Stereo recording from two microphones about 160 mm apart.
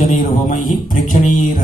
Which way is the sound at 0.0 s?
55° left (ahead or behind).